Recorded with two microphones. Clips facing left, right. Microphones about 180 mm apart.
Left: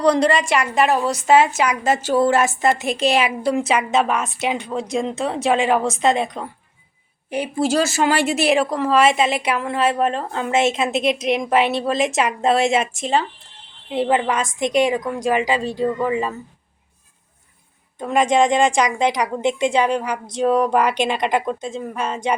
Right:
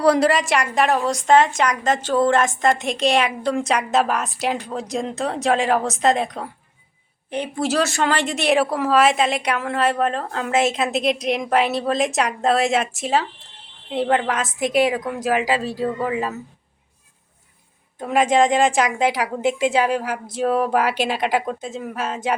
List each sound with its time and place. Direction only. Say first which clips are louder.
0.0 s a woman's voice: even; 5° right (ahead or behind)
18.0 s a woman's voice: even; 5° right (ahead or behind)